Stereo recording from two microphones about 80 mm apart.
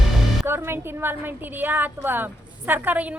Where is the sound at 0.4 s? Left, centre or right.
Right.